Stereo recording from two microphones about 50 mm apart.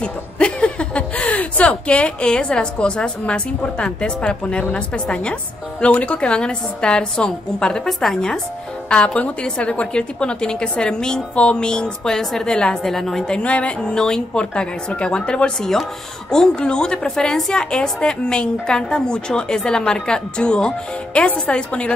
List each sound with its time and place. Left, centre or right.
0.0 s a woman's voice: left
8.8 s a woman's voice: left
12.9 s a woman's voice: centre
13.4 s a woman's voice: left